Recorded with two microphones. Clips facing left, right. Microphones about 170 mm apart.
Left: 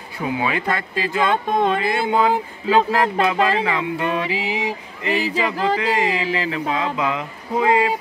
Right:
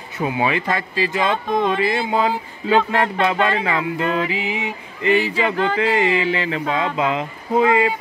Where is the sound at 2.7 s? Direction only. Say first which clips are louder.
Even; 40° left (ahead or behind).